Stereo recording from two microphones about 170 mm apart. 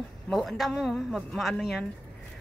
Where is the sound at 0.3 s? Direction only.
Centre (ahead or behind).